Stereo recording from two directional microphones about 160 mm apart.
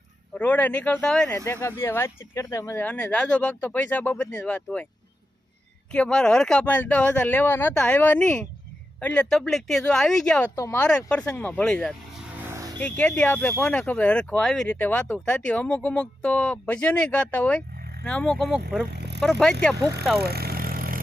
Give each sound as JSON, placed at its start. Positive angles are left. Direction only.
{"t": 0.3, "sound": "speech", "side_deg": 10}
{"t": 1.5, "sound": "speech", "side_deg": 15}
{"t": 5.9, "sound": "speech", "side_deg": 5}
{"t": 10.5, "sound": "speech", "side_deg": 20}
{"t": 10.8, "sound": "speech", "side_deg": 5}
{"t": 12.5, "sound": "vehicle", "side_deg": -20}
{"t": 12.8, "sound": "speech", "side_deg": 10}
{"t": 18.9, "sound": "vehicle", "side_deg": -90}
{"t": 19.2, "sound": "speech", "side_deg": 5}
{"t": 20.2, "sound": "vehicle", "side_deg": -75}